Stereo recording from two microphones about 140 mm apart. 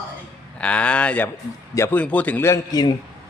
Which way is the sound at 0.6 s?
10° left (ahead or behind).